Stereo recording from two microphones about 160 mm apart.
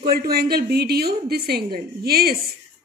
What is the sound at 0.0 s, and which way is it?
A woman's voice, 75° right (ahead or behind).